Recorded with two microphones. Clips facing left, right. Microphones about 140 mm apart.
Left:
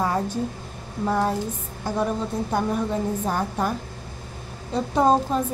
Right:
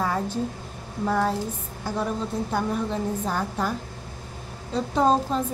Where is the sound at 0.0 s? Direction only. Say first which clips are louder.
Left 2 dB; 10° left (ahead or behind).